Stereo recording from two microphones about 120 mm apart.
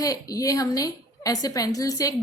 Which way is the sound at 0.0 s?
30° left (ahead or behind).